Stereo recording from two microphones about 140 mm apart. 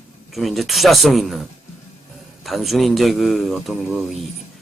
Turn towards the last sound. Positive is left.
turn(degrees=0)  # may be behind; listen again after turning